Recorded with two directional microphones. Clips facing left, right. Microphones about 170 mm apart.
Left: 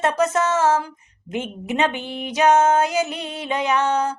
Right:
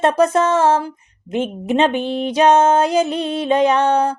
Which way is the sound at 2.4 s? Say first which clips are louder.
Right 3 dB; 30° right (ahead or behind).